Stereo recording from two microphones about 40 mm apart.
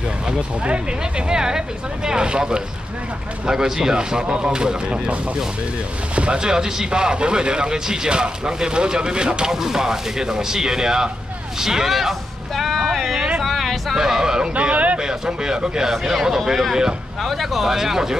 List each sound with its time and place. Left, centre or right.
1.3 s speech: centre
6.1 s speech: right
6.4 s speech: centre
9.5 s speech: centre
13.4 s a sound: centre
13.9 s speech: centre
14.5 s speech: right
15.0 s speech: centre
15.9 s speech: centre